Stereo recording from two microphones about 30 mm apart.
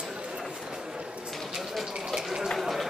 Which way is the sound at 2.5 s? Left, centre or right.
Centre.